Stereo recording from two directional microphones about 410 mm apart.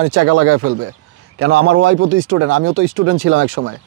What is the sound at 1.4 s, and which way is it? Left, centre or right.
Speech, right.